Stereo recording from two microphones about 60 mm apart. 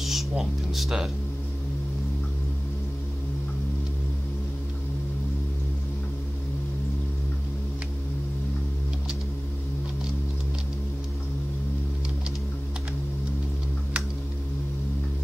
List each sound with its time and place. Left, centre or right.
0.0 s speech: centre